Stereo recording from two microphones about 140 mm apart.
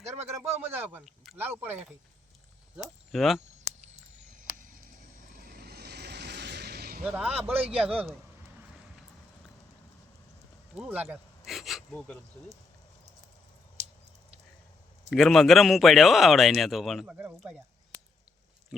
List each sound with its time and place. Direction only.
0.6 s speech: 15° right (ahead or behind)
1.0 s speech: centre (ahead or behind)
1.4 s speech: 15° right (ahead or behind)
3.1 s a man's voice: centre (ahead or behind)
7.0 s a man's voice: 5° right (ahead or behind)
10.7 s a man's voice: 5° right (ahead or behind)
11.4 s a sound: centre (ahead or behind)
11.9 s speech: 10° left (ahead or behind)
15.1 s a man's voice: centre (ahead or behind)
18.7 s speech: centre (ahead or behind)